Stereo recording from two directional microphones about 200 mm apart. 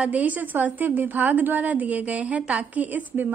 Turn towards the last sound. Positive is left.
turn(degrees=-10)  # may be behind; listen again after turning